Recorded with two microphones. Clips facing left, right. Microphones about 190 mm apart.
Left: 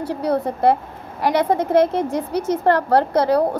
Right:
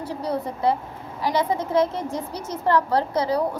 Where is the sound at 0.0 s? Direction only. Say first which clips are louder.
Left 6 dB; 65° left (ahead or behind).